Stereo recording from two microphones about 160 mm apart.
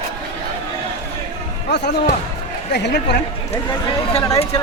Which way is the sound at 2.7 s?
90° left.